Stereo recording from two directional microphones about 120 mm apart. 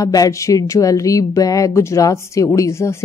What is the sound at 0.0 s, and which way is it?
Speech, 30° left (ahead or behind).